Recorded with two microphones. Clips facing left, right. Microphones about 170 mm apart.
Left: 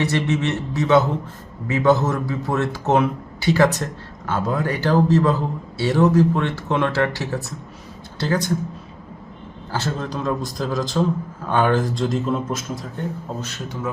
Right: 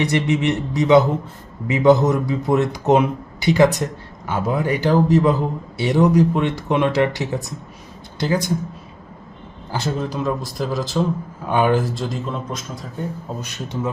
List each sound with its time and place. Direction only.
0.0 s a man's voice: 15° right (ahead or behind)
9.7 s speech: 10° right (ahead or behind)
11.4 s speech: 15° right (ahead or behind); by 12.6 s 5° left (ahead or behind)
13.4 s a man's voice: 20° right (ahead or behind)